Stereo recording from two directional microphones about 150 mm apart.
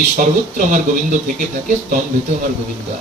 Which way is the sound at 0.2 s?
60° right (ahead or behind).